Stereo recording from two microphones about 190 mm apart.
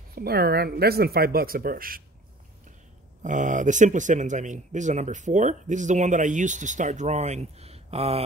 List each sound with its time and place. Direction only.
0.1 s speech: 55° right (ahead or behind)
3.2 s speech: 40° right (ahead or behind)